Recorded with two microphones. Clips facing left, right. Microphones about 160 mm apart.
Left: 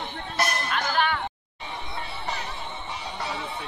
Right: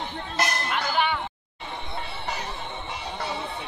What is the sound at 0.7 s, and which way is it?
Music, 10° right (ahead or behind).